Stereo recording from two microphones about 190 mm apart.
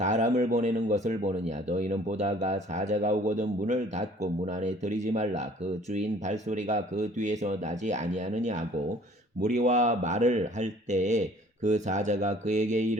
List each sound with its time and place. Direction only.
0.0 s speech: 40° right (ahead or behind)